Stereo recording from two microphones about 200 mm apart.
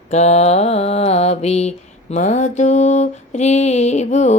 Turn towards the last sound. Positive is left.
turn(degrees=35)  # may be behind; listen again after turning